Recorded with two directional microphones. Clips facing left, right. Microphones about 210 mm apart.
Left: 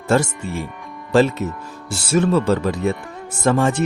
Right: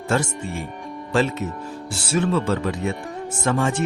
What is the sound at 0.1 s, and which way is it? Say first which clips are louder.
Speech: left 5 dB; 35° left (ahead or behind).